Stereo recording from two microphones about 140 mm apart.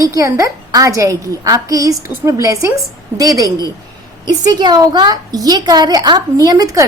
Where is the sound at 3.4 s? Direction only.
25° left (ahead or behind).